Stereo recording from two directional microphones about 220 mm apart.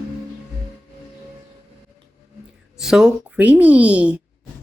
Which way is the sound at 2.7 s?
5° right (ahead or behind).